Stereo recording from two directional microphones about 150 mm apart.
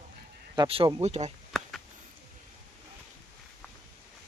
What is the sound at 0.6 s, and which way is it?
Speech, 35° right (ahead or behind).